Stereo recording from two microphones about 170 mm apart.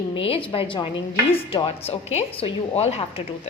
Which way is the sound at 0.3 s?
30° left (ahead or behind).